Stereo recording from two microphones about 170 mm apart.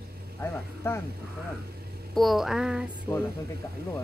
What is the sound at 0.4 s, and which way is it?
Speech, 15° left (ahead or behind).